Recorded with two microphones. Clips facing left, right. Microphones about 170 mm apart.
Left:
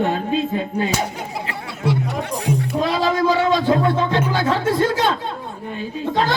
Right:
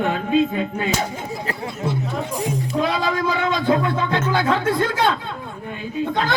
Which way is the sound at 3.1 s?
30° left (ahead or behind).